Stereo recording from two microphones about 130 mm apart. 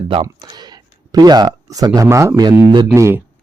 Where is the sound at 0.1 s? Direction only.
35° right (ahead or behind); by 3.2 s 20° right (ahead or behind).